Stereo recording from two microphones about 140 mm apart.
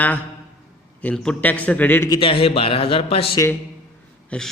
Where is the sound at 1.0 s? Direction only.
5° left (ahead or behind).